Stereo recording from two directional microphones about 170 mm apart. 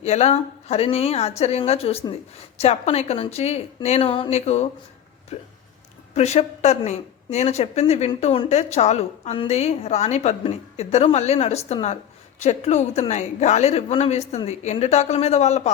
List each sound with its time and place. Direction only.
0.0 s speech: 40° left (ahead or behind)